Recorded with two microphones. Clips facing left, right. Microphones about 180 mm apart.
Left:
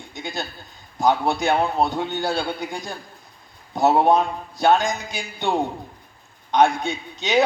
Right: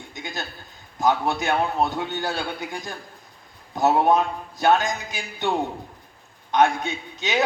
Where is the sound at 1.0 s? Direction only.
15° left (ahead or behind).